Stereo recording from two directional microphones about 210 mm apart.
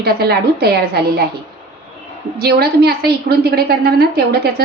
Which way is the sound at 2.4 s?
50° right (ahead or behind).